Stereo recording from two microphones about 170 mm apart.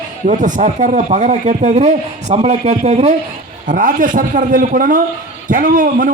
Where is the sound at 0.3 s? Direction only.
50° right (ahead or behind).